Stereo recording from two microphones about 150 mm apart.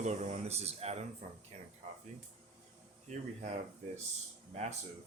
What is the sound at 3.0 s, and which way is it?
Speech, 50° right (ahead or behind).